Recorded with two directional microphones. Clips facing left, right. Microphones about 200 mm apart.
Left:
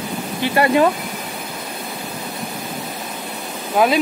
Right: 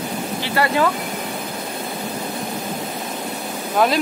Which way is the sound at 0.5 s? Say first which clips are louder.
Left 4 dB; 20° left (ahead or behind).